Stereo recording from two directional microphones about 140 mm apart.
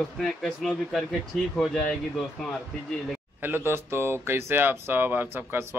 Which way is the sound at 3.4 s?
15° right (ahead or behind).